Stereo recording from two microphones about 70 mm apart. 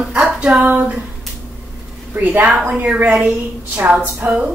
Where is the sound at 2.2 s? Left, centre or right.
Right.